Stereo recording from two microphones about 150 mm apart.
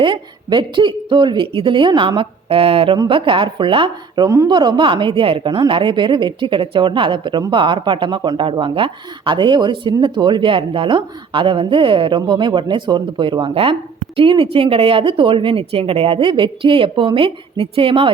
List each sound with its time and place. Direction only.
0.0 s speech: 35° right (ahead or behind)